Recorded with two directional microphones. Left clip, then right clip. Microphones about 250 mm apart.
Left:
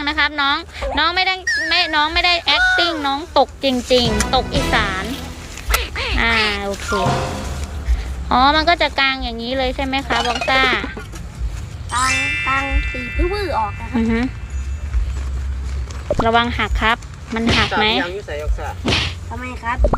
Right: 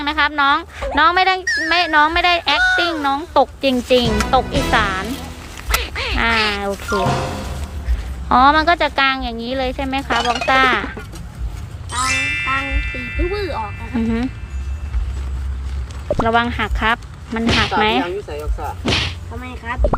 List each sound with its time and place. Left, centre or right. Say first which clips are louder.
0.0 s speech: right 2 dB; centre
1.5 s speech: even; centre
1.7 s speech: right 3 dB; centre
2.6 s speech: even; centre
4.9 s cat: right 1 dB; centre
6.9 s speech: even; centre
10.5 s speech: right 2 dB; centre
11.9 s speech: left 1 dB; centre
16.0 s speech: left 1 dB; centre
17.7 s speech: right 2 dB; centre
18.0 s speech: even; right
18.9 s speech: even; centre
19.4 s speech: left 4 dB; centre